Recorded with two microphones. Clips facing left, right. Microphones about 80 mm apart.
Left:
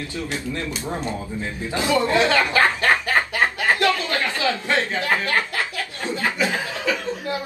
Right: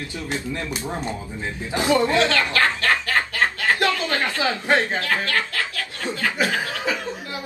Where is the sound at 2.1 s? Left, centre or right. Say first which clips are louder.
Left 2 dB; centre.